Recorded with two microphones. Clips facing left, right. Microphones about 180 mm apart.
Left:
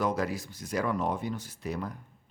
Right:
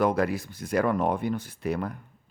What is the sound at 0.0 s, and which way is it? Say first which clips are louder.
Speech: right 5 dB; 60° right (ahead or behind).